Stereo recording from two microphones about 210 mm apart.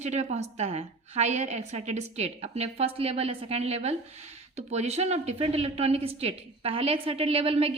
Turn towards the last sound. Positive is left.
turn(degrees=-25)  # may be behind; listen again after turning